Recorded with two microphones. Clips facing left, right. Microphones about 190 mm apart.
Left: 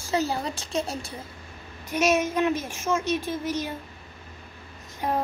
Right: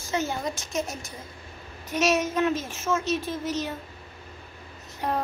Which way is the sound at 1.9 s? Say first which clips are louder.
Left 1 dB; 10° left (ahead or behind).